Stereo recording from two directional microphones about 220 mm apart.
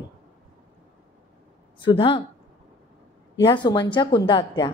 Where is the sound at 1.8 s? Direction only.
20° left (ahead or behind).